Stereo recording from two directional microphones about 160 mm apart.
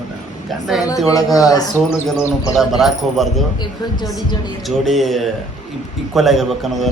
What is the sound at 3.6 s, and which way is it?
Speech, 25° left (ahead or behind).